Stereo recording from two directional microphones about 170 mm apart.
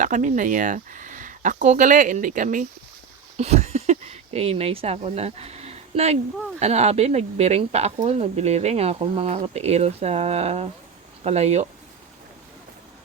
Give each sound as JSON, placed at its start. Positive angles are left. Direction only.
{"t": 0.0, "sound": "speech", "side_deg": -50}
{"t": 3.3, "sound": "speech", "side_deg": -40}